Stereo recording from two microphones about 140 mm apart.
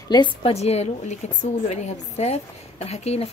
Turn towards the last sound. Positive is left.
turn(degrees=50)  # may be behind; listen again after turning